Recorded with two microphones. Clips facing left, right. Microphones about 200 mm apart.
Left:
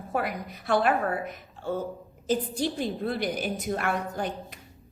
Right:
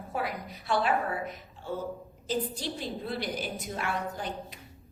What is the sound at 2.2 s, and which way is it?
A woman's voice, 50° left (ahead or behind).